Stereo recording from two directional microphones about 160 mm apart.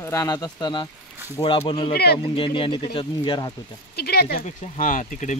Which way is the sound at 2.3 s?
35° left (ahead or behind).